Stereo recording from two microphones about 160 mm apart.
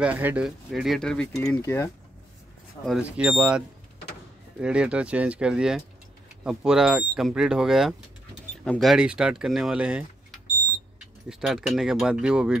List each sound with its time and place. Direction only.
0.0 s speech: 10° right (ahead or behind)
1.4 s speech: 15° left (ahead or behind)
3.0 s speech: 10° right (ahead or behind)